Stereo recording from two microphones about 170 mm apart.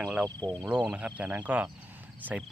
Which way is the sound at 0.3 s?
25° right (ahead or behind).